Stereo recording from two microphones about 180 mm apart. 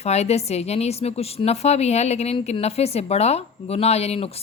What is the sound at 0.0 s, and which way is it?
Speech, 35° left (ahead or behind).